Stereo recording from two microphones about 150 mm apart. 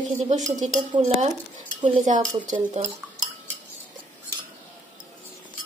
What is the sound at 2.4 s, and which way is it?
Speech, 55° right (ahead or behind).